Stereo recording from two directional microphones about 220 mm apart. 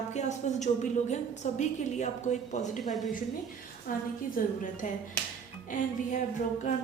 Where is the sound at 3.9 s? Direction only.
40° left (ahead or behind).